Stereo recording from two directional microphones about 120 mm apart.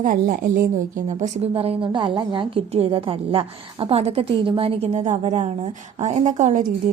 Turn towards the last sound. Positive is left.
turn(degrees=-90)